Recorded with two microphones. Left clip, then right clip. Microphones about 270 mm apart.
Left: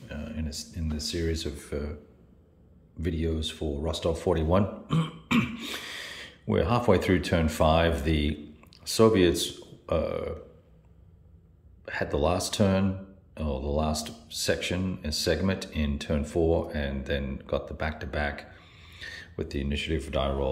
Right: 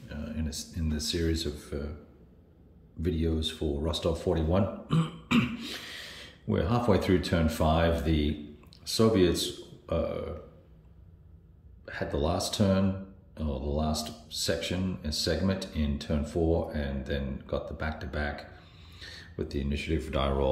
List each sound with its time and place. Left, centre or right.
0.1 s speech: centre
3.0 s speech: centre
11.8 s speech: centre